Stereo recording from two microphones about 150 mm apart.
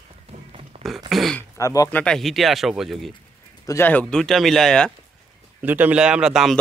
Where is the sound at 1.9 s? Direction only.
10° left (ahead or behind).